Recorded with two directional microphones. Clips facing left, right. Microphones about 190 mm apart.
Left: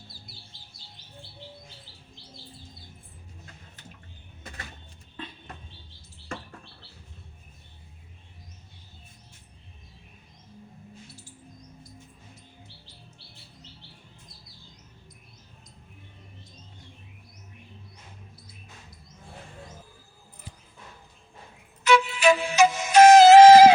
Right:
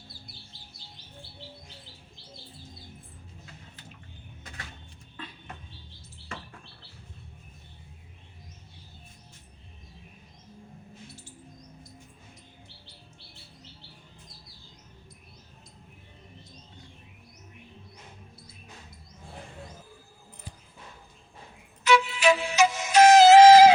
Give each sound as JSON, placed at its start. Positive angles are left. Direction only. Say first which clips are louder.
{"t": 21.8, "sound": "music", "louder": "left 2 dB", "side_deg": 50}